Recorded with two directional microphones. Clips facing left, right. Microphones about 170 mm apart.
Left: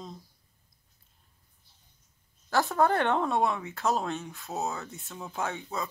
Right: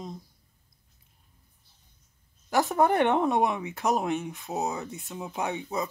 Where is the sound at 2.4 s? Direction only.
20° right (ahead or behind).